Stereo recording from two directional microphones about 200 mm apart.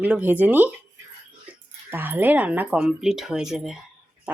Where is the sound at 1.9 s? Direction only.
10° right (ahead or behind).